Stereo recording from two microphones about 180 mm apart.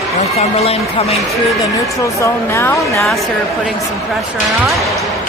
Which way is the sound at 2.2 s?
15° left (ahead or behind).